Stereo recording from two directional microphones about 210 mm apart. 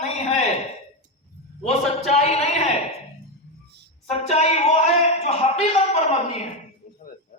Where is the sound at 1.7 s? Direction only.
30° left (ahead or behind).